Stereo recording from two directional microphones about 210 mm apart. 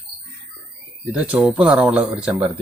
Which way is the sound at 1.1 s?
5° right (ahead or behind).